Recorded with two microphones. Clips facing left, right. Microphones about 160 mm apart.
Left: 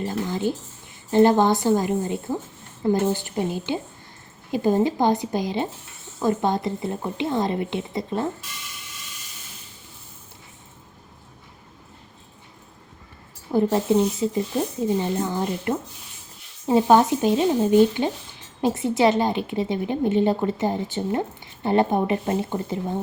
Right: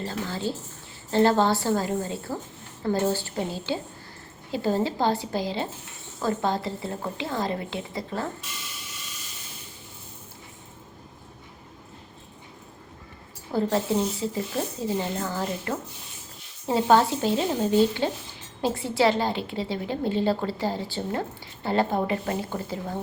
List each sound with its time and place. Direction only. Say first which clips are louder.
0.0 s a woman's voice: left 5 dB; 15° left (ahead or behind)
13.5 s a woman's voice: left 5 dB; 20° left (ahead or behind)